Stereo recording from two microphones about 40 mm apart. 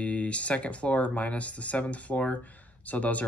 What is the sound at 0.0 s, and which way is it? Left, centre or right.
Speech, left.